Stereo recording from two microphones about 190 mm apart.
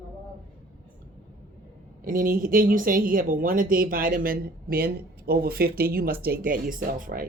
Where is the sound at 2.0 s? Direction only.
45° right (ahead or behind).